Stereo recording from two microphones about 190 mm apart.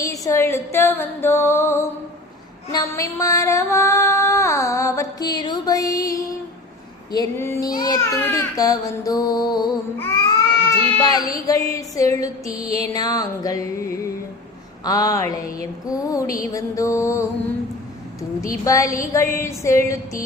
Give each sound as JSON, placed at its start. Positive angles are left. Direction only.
{"t": 0.0, "sound": "music", "side_deg": 15}
{"t": 2.7, "sound": "female singing", "side_deg": 15}
{"t": 7.1, "sound": "a child's voice", "side_deg": 15}
{"t": 11.4, "sound": "music", "side_deg": 15}
{"t": 14.8, "sound": "music", "side_deg": 20}